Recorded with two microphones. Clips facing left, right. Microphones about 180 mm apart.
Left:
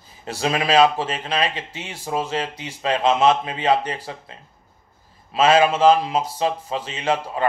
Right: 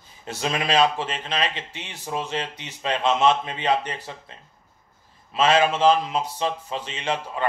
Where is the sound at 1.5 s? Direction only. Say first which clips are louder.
Left 4 dB; 40° left (ahead or behind).